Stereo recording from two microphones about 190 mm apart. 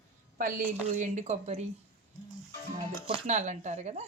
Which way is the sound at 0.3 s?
45° right (ahead or behind).